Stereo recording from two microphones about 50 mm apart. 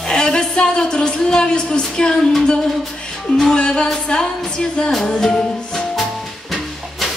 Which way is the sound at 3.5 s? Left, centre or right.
Centre.